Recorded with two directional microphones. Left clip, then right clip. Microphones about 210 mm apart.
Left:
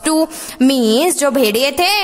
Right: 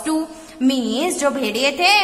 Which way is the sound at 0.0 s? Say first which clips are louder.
Left 7 dB; 50° left (ahead or behind).